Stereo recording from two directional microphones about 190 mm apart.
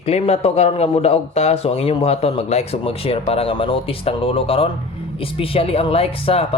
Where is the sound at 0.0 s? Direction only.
30° left (ahead or behind).